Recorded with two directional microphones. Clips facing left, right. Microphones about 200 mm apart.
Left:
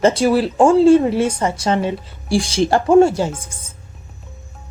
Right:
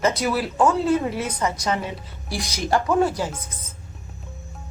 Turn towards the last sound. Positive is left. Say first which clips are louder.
# left 6 dB
turn(degrees=30)  # may be behind; listen again after turning